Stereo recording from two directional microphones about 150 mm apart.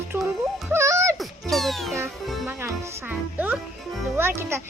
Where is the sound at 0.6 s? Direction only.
20° right (ahead or behind).